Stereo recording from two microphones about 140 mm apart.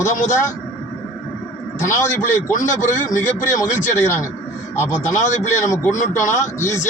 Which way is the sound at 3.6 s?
15° left (ahead or behind).